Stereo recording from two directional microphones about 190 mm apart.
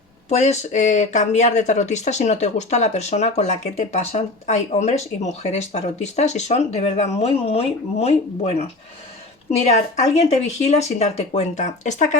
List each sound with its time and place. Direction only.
0.3 s speech: 35° left (ahead or behind)